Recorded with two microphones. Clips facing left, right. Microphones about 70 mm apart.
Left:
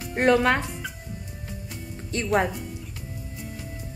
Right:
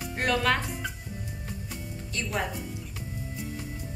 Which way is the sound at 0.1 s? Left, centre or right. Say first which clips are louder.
Left 6 dB; left.